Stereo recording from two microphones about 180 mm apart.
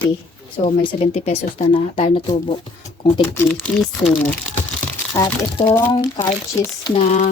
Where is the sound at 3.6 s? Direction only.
5° left (ahead or behind).